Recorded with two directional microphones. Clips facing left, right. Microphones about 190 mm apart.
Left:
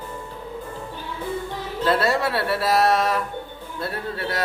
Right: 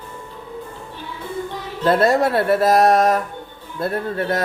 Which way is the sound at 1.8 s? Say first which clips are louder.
Right 5 dB; 45° right (ahead or behind).